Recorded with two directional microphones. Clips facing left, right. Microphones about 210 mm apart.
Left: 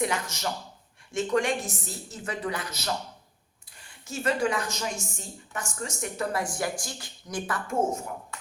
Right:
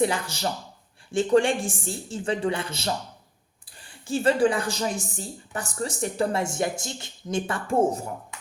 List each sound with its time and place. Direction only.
0.0 s a woman's voice: 30° right (ahead or behind)